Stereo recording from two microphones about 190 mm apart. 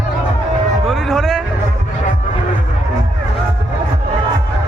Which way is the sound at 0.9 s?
Centre (ahead or behind).